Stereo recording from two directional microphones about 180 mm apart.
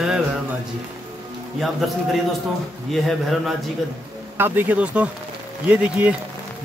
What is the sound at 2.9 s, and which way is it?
Speech, centre (ahead or behind).